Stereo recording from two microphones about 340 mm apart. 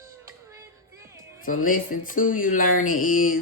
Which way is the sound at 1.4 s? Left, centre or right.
Left.